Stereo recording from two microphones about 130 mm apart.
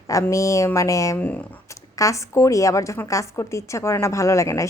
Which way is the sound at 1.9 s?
25° left (ahead or behind).